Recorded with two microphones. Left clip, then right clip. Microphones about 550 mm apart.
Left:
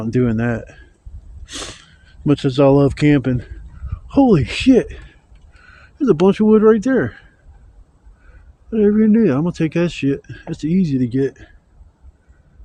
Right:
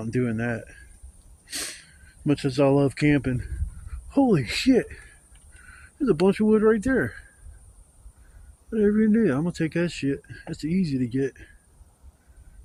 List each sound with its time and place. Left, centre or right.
0.0 s speech: right
8.7 s speech: right